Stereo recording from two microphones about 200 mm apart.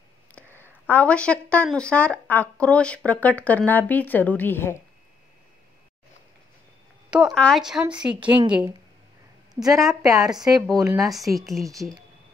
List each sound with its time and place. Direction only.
0.5 s a sound: 10° right (ahead or behind)
0.8 s speech: 5° left (ahead or behind)
7.1 s speech: 5° right (ahead or behind)
9.6 s speech: 15° right (ahead or behind)
11.1 s speech: centre (ahead or behind)